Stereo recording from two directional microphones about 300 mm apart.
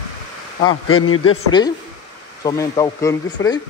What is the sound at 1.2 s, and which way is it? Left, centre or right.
Speech, centre.